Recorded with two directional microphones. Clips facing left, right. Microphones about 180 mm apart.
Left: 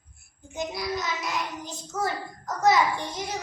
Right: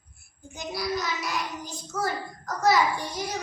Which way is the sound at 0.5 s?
20° left (ahead or behind).